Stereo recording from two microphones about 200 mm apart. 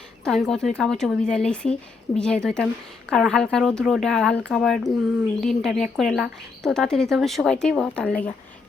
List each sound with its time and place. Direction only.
0.3 s speech: centre (ahead or behind)